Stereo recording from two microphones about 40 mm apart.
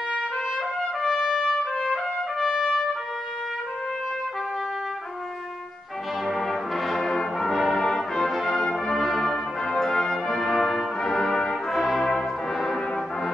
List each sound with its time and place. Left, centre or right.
0.7 s trumpet: centre
6.2 s brass instrument: centre
7.7 s brass instrument: centre
8.2 s brass instrument: centre
8.5 s brass instrument: centre
8.9 s brass instrument: centre
9.3 s brass instrument: centre